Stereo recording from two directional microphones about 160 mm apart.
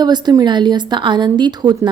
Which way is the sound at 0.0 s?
25° right (ahead or behind).